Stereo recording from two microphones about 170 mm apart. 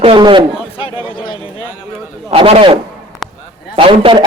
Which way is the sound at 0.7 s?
35° left (ahead or behind).